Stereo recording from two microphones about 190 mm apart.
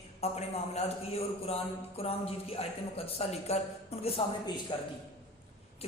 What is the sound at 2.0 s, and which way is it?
A man's voice, 30° left (ahead or behind).